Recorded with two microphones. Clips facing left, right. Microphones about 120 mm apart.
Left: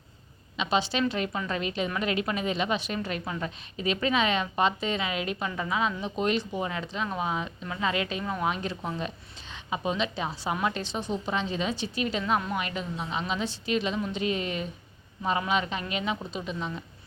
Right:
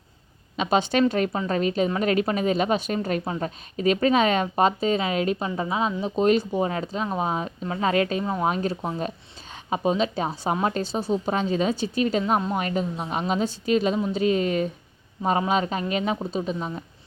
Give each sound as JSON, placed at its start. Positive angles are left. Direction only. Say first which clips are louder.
{"t": 0.5, "sound": "a woman's voice", "louder": "right 5 dB", "side_deg": -45}
{"t": 8.2, "sound": "speech", "louder": "right 5 dB", "side_deg": -30}
{"t": 8.4, "sound": "a woman's voice", "louder": "right 5 dB", "side_deg": -40}